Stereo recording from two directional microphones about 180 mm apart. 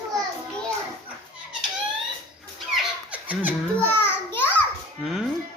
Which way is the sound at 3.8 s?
10° left (ahead or behind).